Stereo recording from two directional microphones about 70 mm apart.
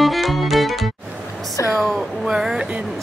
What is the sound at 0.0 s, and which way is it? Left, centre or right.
Music, centre.